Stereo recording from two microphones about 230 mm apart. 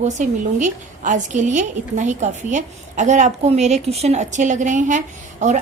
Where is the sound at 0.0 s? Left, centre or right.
Right.